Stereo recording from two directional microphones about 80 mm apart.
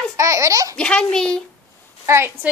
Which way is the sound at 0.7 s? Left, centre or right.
Centre.